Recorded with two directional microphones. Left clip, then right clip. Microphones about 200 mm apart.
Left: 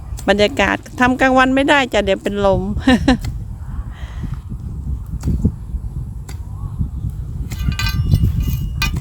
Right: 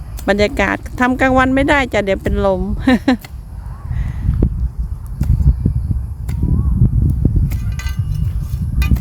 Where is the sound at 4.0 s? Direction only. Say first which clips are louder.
Right 4 dB; centre (ahead or behind).